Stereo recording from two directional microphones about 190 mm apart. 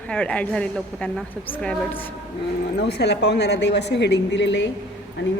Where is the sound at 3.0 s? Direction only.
60° left (ahead or behind).